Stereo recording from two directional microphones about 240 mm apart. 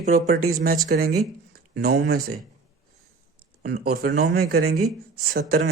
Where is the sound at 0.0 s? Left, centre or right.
Right.